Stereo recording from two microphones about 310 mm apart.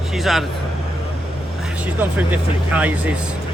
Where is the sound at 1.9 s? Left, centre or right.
Centre.